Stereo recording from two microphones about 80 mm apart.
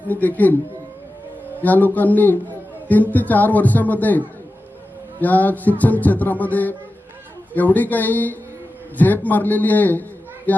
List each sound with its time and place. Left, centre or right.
0.1 s music: left
1.6 s music: left
5.2 s music: left
9.0 s a man's voice: left